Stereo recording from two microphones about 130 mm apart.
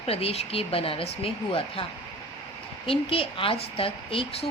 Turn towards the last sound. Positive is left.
turn(degrees=45)  # may be behind; listen again after turning